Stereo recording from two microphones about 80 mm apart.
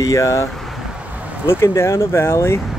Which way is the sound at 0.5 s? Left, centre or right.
Centre.